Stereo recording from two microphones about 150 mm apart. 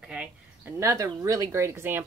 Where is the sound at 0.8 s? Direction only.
20° right (ahead or behind).